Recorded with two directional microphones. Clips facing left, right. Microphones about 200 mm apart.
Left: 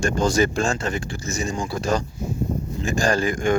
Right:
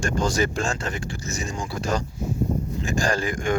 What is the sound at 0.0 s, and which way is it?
Speech, 25° left (ahead or behind).